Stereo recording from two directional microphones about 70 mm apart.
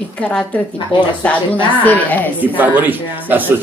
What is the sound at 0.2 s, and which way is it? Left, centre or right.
A woman's voice, centre.